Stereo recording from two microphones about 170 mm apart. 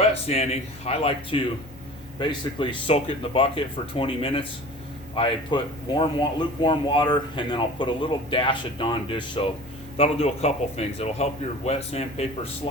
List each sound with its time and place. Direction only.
0.1 s a man's voice: 40° left (ahead or behind)